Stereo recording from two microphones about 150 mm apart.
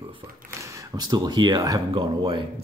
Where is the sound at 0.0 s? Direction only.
35° right (ahead or behind).